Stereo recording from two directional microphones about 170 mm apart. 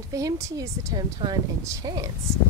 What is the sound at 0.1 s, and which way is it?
Speech, 20° right (ahead or behind).